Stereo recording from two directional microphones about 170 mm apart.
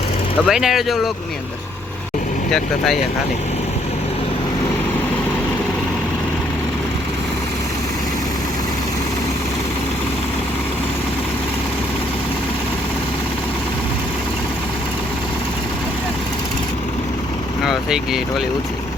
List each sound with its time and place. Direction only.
0.4 s speech: centre (ahead or behind)
2.5 s speech: centre (ahead or behind)
17.7 s speech: 5° right (ahead or behind)